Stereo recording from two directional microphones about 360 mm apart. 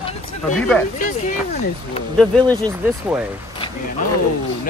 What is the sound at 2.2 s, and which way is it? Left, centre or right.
Speech, centre.